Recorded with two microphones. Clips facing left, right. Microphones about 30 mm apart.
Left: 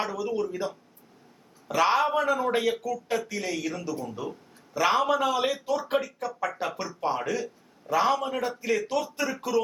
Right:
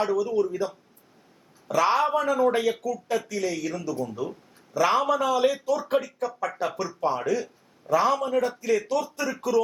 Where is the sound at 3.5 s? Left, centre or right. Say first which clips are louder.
Right 1 dB; centre.